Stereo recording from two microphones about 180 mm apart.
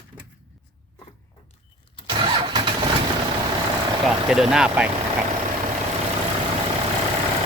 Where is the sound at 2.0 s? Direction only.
25° right (ahead or behind).